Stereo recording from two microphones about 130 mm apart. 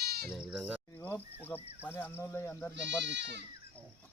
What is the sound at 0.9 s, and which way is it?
Speech, 15° left (ahead or behind).